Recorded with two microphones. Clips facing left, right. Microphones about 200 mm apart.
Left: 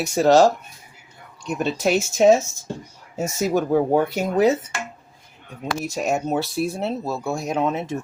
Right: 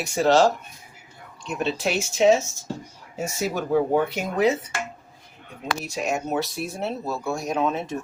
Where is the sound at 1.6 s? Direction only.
45° left (ahead or behind).